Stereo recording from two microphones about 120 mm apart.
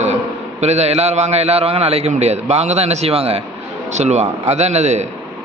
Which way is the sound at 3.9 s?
70° right (ahead or behind).